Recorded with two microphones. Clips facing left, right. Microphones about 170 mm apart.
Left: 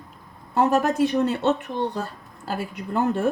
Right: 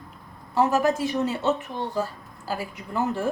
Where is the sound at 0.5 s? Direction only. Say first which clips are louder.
Left 2 dB; 60° left (ahead or behind).